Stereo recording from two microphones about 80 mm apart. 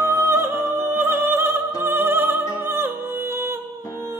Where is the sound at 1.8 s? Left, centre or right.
Right.